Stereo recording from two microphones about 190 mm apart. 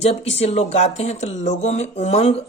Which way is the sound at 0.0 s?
35° left (ahead or behind).